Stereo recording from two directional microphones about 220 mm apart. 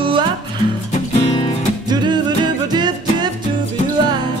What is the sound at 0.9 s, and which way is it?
Music, 30° left (ahead or behind).